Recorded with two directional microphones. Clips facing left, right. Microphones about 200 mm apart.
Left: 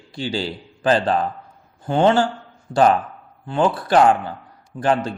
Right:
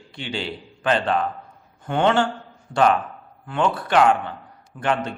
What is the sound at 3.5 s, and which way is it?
Speech, 35° left (ahead or behind).